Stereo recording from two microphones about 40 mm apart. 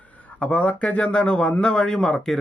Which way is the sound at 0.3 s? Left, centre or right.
Left.